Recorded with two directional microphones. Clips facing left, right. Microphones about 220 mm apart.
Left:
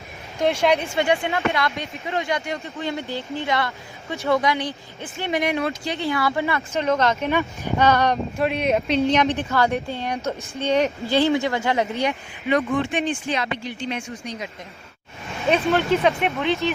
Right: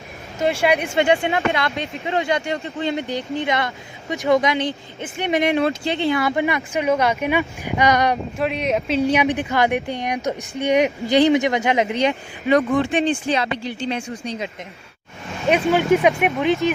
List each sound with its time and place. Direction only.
0.6 s speech: 15° right (ahead or behind)
8.4 s speech: centre (ahead or behind); by 12.1 s 20° right (ahead or behind)
12.5 s speech: 35° right (ahead or behind)
15.4 s speech: 15° right (ahead or behind)